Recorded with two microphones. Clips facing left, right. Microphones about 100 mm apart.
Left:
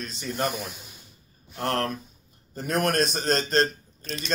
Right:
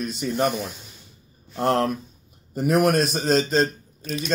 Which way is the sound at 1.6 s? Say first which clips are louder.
Right 6 dB; 20° right (ahead or behind).